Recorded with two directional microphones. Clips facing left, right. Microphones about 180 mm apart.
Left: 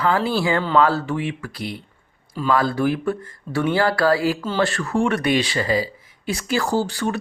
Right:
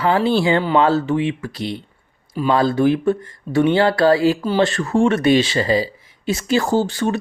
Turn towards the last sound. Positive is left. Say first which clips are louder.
# right 3 dB
turn(degrees=-20)  # may be behind; listen again after turning